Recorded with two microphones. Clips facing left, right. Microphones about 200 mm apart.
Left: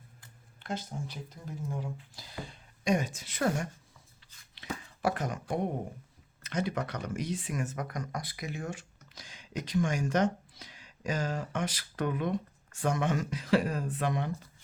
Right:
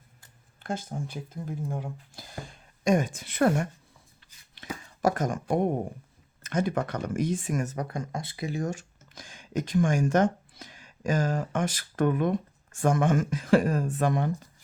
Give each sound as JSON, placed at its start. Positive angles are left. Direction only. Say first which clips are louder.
{"t": 0.6, "sound": "speech", "louder": "right 4 dB", "side_deg": -50}
{"t": 4.6, "sound": "a sound", "louder": "right 1 dB", "side_deg": -45}
{"t": 5.0, "sound": "speech", "louder": "right 6 dB", "side_deg": -45}